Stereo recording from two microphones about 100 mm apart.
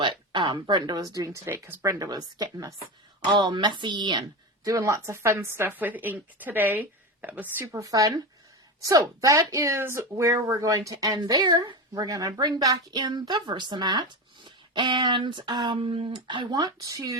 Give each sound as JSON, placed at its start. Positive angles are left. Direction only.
{"t": 0.0, "sound": "speech", "side_deg": -55}
{"t": 1.5, "sound": "speech", "side_deg": -25}
{"t": 3.2, "sound": "speech", "side_deg": -50}
{"t": 4.6, "sound": "a woman's voice", "side_deg": -35}